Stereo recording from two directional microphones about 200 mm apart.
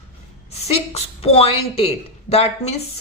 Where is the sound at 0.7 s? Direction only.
30° left (ahead or behind).